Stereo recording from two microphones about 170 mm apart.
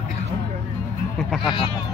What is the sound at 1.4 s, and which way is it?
Speech, 25° left (ahead or behind).